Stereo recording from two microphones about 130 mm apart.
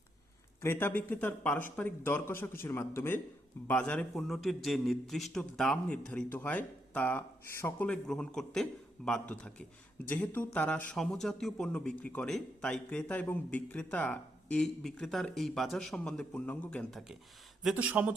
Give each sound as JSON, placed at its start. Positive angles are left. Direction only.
{"t": 0.6, "sound": "a man's voice", "side_deg": 15}
{"t": 7.9, "sound": "a man's voice", "side_deg": 5}
{"t": 17.6, "sound": "speech", "side_deg": -5}